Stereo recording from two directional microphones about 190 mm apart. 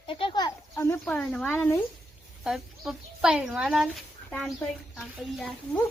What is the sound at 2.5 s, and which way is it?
Speech, centre (ahead or behind).